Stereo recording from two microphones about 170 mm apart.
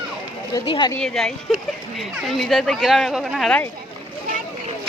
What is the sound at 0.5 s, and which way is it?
Speech, 30° left (ahead or behind).